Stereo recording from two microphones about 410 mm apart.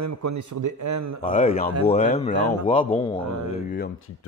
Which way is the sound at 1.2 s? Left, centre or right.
Centre.